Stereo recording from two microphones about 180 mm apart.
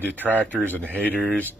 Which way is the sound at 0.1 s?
10° right (ahead or behind).